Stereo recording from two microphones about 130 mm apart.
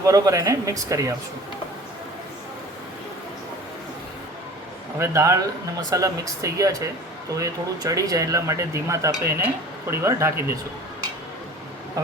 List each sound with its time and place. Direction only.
0.0 s speech: 25° right (ahead or behind)
4.9 s speech: 20° right (ahead or behind)
12.0 s speech: 25° right (ahead or behind)